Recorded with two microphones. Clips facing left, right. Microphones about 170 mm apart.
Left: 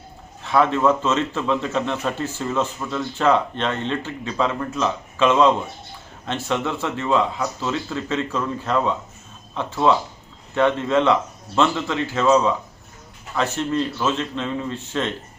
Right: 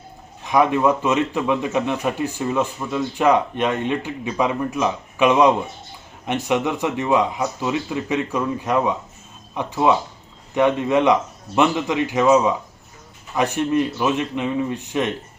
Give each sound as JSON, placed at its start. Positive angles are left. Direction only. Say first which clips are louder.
{"t": 0.4, "sound": "a man's voice", "louder": "right 1 dB", "side_deg": -15}